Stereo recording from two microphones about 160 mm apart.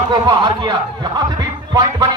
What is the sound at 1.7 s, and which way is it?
Music, 25° right (ahead or behind).